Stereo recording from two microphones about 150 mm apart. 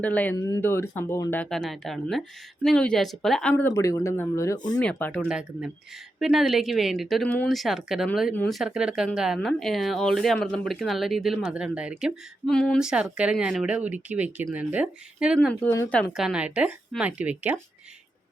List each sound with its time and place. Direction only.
0.0 s speech: 10° left (ahead or behind)
0.3 s speech: 20° left (ahead or behind)
1.5 s speech: centre (ahead or behind)
3.5 s speech: 20° left (ahead or behind)
4.8 s speech: 10° left (ahead or behind)
5.3 s speech: 5° right (ahead or behind)
12.5 s speech: 5° left (ahead or behind)
12.8 s speech: 5° right (ahead or behind)
15.4 s speech: 10° left (ahead or behind)
16.1 s speech: 5° right (ahead or behind)